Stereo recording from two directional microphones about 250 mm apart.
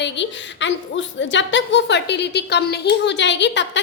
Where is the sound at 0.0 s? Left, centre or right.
Left.